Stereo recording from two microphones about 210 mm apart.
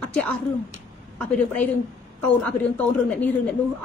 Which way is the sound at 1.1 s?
5° left (ahead or behind).